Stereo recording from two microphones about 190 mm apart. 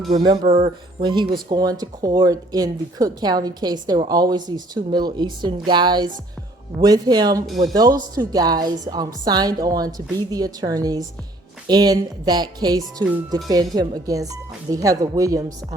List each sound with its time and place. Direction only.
0.1 s speech: 25° right (ahead or behind)